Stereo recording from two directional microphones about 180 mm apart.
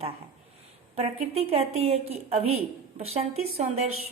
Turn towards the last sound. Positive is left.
turn(degrees=-35)  # may be behind; listen again after turning